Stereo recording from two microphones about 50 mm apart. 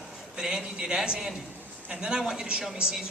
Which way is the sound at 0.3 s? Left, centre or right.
Centre.